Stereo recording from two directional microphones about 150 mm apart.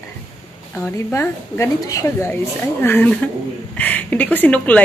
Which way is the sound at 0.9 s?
15° left (ahead or behind).